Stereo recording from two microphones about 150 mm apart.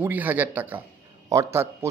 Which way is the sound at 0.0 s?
10° right (ahead or behind).